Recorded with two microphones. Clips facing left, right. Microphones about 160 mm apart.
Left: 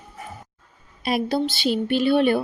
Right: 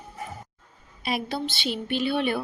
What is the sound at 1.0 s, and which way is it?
Speech, 45° left (ahead or behind).